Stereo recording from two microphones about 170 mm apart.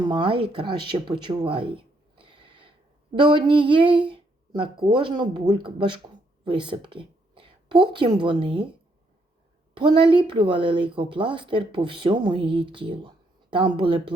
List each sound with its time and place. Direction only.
0.0 s speech: 25° right (ahead or behind)
9.7 s speech: 30° right (ahead or behind)